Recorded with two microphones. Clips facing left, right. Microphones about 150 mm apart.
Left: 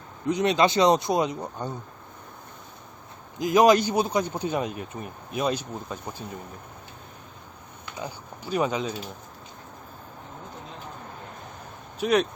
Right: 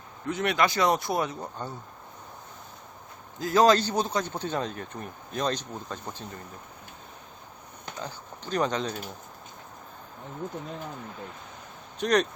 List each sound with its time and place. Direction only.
0.3 s speech: 20° left (ahead or behind)
3.3 s a man's voice: 15° left (ahead or behind)
7.9 s speech: 10° left (ahead or behind)
11.9 s speech: 5° left (ahead or behind)